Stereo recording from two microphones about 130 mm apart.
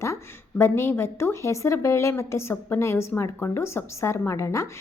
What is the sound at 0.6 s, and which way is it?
A woman's voice, 20° left (ahead or behind).